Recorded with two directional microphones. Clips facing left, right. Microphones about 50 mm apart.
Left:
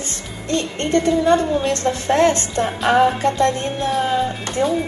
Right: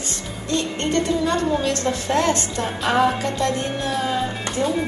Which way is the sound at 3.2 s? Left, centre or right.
Left.